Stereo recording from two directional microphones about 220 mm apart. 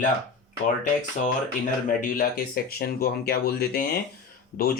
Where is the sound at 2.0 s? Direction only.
40° left (ahead or behind).